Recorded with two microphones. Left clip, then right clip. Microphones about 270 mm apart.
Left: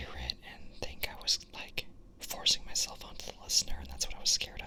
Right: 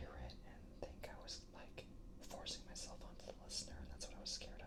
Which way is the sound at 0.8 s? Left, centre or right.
Left.